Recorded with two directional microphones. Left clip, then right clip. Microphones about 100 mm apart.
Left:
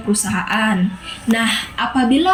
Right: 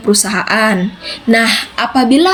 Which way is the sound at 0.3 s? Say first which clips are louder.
Right 6 dB; 25° right (ahead or behind).